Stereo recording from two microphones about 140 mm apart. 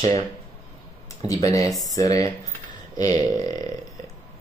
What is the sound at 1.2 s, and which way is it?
Speech, 25° left (ahead or behind).